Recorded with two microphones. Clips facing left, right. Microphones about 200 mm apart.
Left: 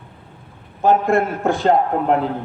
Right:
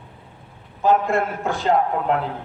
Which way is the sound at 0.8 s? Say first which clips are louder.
Left 3 dB; 50° left (ahead or behind).